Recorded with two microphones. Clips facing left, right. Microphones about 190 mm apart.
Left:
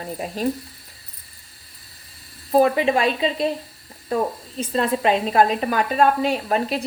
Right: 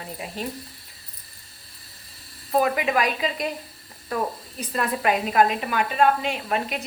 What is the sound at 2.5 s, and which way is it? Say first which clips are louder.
A woman's voice: left 5 dB; 30° left (ahead or behind).